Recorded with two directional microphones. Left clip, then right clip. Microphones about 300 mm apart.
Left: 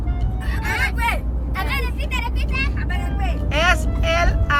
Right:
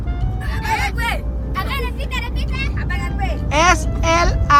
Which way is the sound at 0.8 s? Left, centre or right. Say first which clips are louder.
Even; centre.